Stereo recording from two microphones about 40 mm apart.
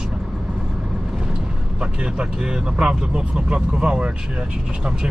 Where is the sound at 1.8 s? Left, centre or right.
Right.